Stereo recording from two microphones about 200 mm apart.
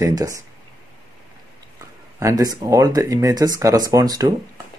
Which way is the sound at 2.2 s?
15° right (ahead or behind).